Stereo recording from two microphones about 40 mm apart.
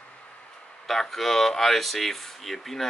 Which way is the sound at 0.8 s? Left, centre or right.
Centre.